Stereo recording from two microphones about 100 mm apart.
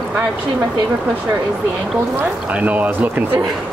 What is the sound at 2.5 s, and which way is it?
Speech, 15° right (ahead or behind).